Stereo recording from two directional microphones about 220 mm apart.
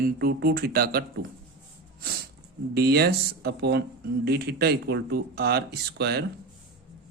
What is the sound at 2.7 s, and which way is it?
Speech, 45° right (ahead or behind).